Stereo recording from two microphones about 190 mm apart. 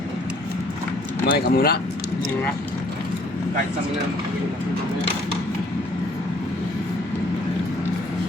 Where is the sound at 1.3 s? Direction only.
55° left (ahead or behind).